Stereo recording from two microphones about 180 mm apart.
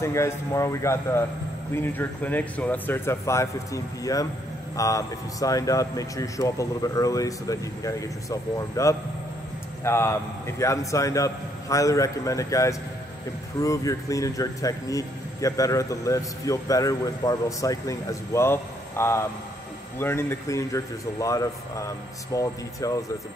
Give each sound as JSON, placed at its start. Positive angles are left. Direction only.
{"t": 0.0, "sound": "a man's voice", "side_deg": 15}